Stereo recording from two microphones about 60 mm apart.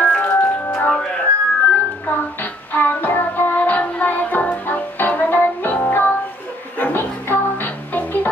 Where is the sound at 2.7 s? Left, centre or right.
Left.